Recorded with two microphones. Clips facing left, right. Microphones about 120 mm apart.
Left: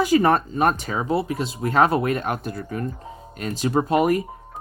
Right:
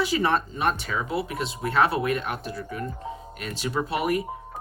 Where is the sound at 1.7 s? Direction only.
40° left (ahead or behind).